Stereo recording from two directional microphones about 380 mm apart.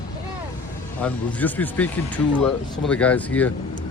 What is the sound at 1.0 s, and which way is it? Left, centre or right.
Speech, centre.